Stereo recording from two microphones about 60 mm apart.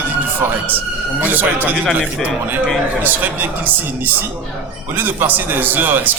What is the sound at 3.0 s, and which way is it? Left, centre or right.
A man's voice, right.